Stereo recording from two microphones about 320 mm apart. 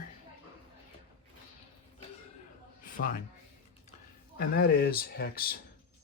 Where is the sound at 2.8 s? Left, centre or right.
Left.